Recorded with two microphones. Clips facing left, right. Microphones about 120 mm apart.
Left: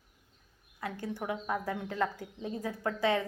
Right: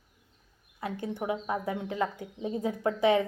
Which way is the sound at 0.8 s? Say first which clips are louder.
Right 3 dB; 20° right (ahead or behind).